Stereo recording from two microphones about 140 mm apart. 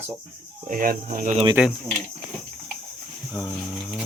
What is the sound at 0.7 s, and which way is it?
Speech, 80° right.